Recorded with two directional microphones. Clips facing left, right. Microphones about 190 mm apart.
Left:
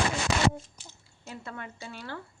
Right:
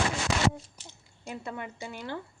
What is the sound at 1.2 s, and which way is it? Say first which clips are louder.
Speech: right 3 dB; 20° right (ahead or behind).